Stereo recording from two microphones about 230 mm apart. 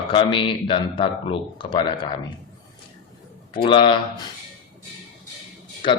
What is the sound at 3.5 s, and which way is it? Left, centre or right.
Speech, left.